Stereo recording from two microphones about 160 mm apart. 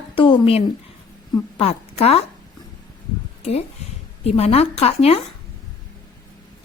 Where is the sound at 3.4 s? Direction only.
40° left (ahead or behind).